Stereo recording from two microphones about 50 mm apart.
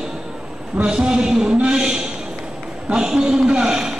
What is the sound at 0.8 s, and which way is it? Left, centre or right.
Speech, centre.